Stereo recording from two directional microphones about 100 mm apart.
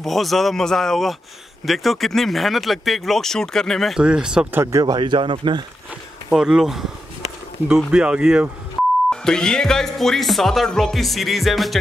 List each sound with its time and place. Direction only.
0.0 s speech: centre (ahead or behind)
4.0 s speech: 10° right (ahead or behind)
4.5 s speech: 25° right (ahead or behind)
4.8 s speech: 50° right (ahead or behind)
6.3 s speech: 5° right (ahead or behind)
9.1 s speech: 5° left (ahead or behind)